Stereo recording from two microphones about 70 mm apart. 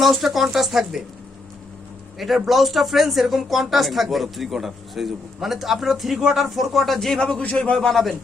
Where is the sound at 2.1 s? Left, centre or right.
Centre.